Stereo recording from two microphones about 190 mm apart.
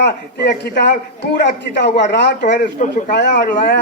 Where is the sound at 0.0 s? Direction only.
65° left (ahead or behind).